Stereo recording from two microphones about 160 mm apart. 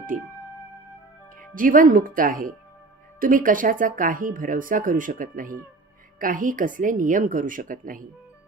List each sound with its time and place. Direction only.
0.1 s speech: 50° right (ahead or behind)
1.5 s speech: 60° right (ahead or behind)